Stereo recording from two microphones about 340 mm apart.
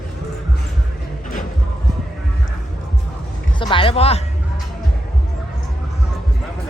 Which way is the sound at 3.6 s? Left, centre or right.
Centre.